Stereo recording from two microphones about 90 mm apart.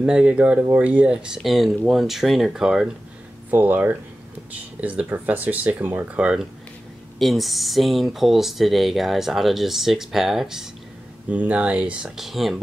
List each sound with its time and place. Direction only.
0.0 s speech: 10° right (ahead or behind)
3.4 s speech: 20° right (ahead or behind)
7.2 s speech: centre (ahead or behind)
11.2 s speech: 15° right (ahead or behind)